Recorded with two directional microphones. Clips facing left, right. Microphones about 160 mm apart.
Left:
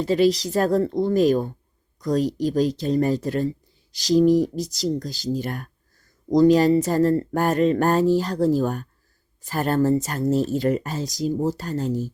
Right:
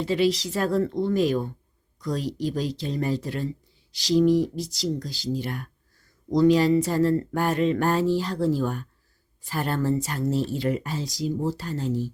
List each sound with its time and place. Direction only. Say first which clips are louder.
0.0 s a woman's voice: left 4 dB; 40° left (ahead or behind)